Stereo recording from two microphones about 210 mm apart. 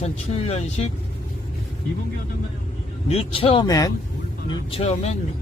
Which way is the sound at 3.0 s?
30° left (ahead or behind).